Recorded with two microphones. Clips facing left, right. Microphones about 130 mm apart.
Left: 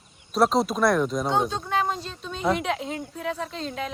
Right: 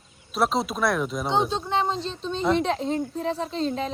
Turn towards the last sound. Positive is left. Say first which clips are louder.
# right 4 dB
turn(degrees=-30)  # may be behind; listen again after turning